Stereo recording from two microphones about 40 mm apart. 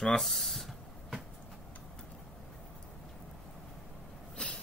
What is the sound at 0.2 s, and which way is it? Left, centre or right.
Speech, centre.